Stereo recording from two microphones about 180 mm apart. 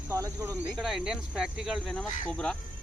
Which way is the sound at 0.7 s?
Centre (ahead or behind).